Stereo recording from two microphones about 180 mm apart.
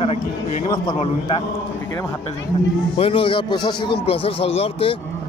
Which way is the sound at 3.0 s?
30° left (ahead or behind).